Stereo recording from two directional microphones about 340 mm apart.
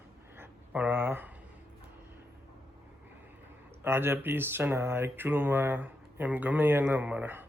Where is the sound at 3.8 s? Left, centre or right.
Centre.